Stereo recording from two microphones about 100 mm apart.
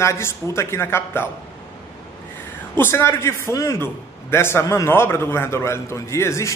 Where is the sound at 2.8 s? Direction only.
25° left (ahead or behind).